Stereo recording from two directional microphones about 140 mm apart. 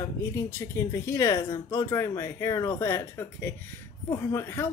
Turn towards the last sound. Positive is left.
turn(degrees=20)  # may be behind; listen again after turning